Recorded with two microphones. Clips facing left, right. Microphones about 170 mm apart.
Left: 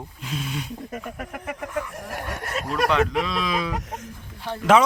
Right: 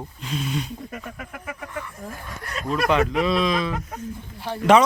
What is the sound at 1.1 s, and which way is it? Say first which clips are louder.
Speech: left 3 dB; 45° left (ahead or behind).